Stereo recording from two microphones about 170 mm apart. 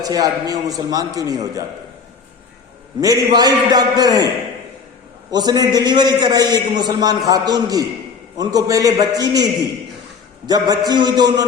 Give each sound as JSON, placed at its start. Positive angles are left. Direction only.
{"t": 0.0, "sound": "a man's voice", "side_deg": -20}
{"t": 3.0, "sound": "a man's voice", "side_deg": -20}
{"t": 5.3, "sound": "a man's voice", "side_deg": -25}